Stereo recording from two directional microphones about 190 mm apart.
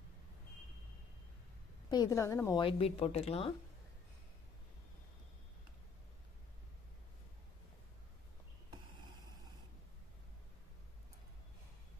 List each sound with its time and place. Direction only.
1.9 s a woman's voice: 20° left (ahead or behind)
2.6 s speech: 30° left (ahead or behind)
9.0 s a sound: 20° right (ahead or behind)